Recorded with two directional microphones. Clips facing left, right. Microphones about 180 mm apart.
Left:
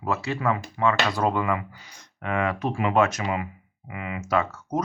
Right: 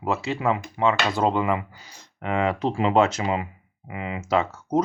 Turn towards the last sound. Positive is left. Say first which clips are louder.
# right 2 dB
turn(degrees=-25)  # may be behind; listen again after turning